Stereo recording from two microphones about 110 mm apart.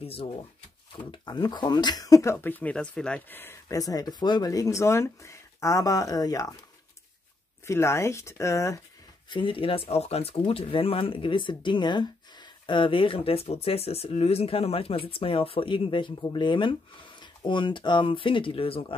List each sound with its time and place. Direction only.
0.0 s speech: 60° left (ahead or behind)
1.1 s speech: 40° left (ahead or behind)
2.3 s speech: 15° left (ahead or behind)
3.3 s speech: 25° left (ahead or behind)
7.6 s speech: 25° left (ahead or behind)
9.3 s speech: 50° left (ahead or behind)